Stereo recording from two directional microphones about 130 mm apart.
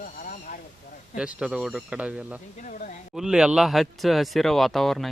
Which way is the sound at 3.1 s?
5° right (ahead or behind).